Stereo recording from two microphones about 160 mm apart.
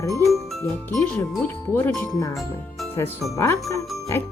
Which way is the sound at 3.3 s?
15° left (ahead or behind).